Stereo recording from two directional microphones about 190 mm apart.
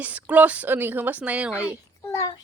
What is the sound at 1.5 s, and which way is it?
Speech, 15° left (ahead or behind).